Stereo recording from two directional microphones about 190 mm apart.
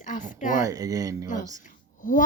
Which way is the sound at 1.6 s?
45° left (ahead or behind).